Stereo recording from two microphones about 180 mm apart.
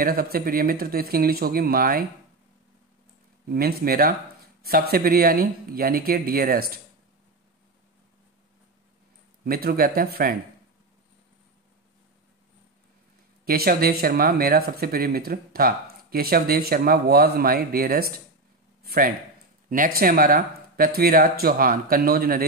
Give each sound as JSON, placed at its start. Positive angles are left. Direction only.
{"t": 0.0, "sound": "speech", "side_deg": -55}
{"t": 3.4, "sound": "speech", "side_deg": -55}
{"t": 9.4, "sound": "speech", "side_deg": -55}
{"t": 13.5, "sound": "a man's voice", "side_deg": -55}